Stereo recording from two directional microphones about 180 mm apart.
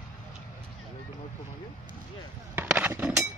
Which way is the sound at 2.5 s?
10° right (ahead or behind).